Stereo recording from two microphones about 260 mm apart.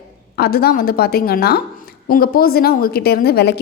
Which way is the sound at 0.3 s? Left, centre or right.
Left.